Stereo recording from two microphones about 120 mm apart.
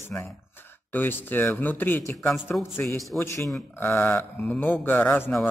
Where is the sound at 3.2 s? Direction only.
25° left (ahead or behind).